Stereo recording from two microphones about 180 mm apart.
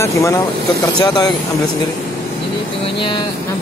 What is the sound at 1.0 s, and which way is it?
Speech, 25° left (ahead or behind).